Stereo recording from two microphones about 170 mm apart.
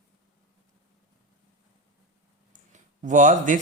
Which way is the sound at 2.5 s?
50° right (ahead or behind).